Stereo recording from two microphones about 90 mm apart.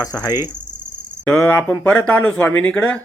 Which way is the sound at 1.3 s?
25° left (ahead or behind).